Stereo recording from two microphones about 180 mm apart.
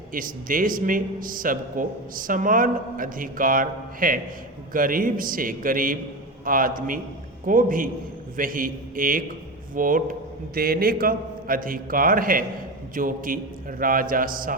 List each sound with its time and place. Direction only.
0.1 s a man's voice: 50° right (ahead or behind)